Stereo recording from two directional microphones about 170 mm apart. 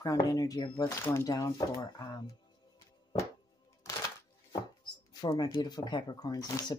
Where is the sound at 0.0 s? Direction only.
20° left (ahead or behind).